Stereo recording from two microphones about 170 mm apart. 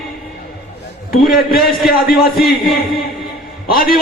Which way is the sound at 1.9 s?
60° left (ahead or behind).